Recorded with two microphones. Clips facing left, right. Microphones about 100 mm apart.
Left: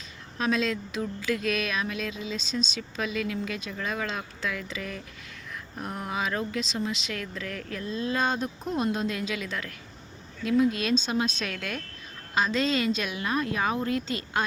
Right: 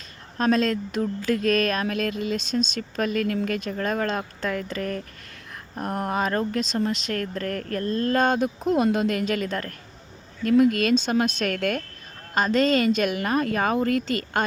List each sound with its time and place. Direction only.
0.3 s speech: 45° right (ahead or behind)
10.4 s a woman's voice: 60° right (ahead or behind)